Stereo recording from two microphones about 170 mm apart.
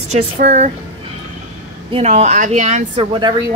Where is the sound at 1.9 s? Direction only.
40° right (ahead or behind).